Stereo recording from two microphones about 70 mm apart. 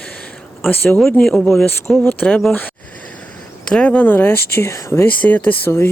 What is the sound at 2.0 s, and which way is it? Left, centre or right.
Speech, left.